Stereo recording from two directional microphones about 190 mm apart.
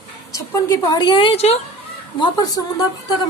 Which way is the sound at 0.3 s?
15° left (ahead or behind).